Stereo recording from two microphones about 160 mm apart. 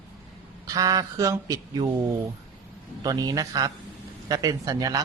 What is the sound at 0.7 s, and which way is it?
Speech, 25° right (ahead or behind).